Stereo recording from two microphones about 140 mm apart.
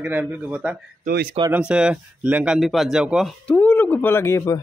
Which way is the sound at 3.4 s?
10° left (ahead or behind).